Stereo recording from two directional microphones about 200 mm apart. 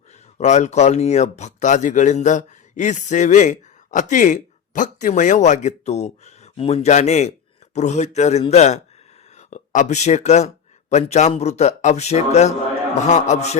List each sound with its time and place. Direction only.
0.3 s speech: 35° left (ahead or behind)